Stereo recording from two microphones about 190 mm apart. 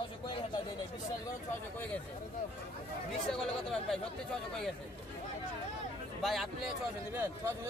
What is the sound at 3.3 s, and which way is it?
Speech, centre (ahead or behind).